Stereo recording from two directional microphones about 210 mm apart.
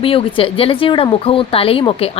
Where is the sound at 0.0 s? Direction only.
25° left (ahead or behind).